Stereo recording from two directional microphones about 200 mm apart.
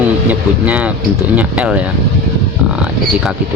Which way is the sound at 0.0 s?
5° right (ahead or behind).